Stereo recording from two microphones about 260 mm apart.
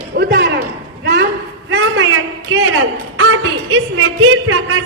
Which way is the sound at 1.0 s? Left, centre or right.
Right.